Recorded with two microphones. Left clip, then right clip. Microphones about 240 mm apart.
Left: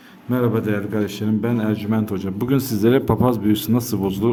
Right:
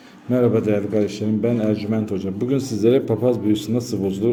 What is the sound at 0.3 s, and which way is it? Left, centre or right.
A man's voice, centre.